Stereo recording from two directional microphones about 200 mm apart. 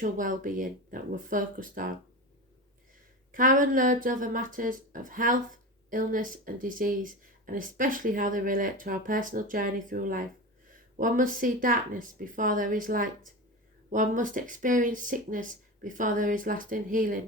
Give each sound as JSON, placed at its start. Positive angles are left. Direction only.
{"t": 0.0, "sound": "speech", "side_deg": -40}
{"t": 3.3, "sound": "speech", "side_deg": -40}